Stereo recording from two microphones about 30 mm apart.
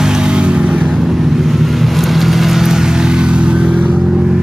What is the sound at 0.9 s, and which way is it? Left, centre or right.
Vehicle, centre.